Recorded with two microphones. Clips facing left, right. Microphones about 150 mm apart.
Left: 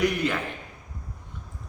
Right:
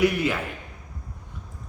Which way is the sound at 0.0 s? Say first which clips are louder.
Right 3 dB; 5° right (ahead or behind).